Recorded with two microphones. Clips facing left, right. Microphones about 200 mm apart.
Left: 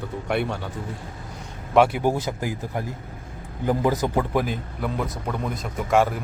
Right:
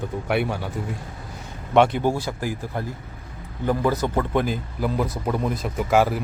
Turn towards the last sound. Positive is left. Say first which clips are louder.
# right 1 dB
turn(degrees=-5)  # may be behind; listen again after turning